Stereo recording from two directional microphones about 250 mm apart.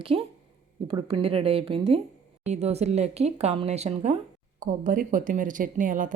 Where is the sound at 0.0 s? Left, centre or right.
Right.